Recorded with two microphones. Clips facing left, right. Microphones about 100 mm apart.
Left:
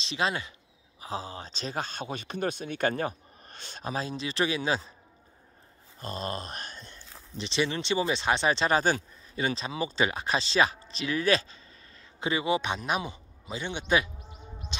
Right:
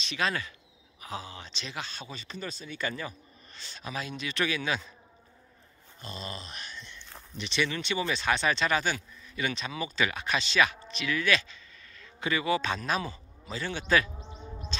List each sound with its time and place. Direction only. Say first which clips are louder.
0.0 s speech: left 1 dB; 25° left (ahead or behind); by 3.9 s 50° left (ahead or behind)
3.9 s speech: left 3 dB; 35° left (ahead or behind)
5.9 s speech: left 6 dB; 45° left (ahead or behind)
7.3 s speech: left 2 dB; 30° left (ahead or behind)
14.7 s music: right 1 dB; 15° left (ahead or behind)